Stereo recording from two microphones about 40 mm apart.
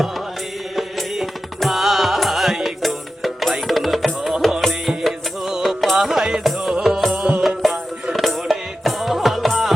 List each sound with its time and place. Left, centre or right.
0.8 s music: centre
6.0 s music: centre; by 7.3 s right
7.4 s music: centre